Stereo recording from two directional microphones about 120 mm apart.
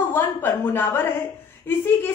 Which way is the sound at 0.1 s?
15° left (ahead or behind).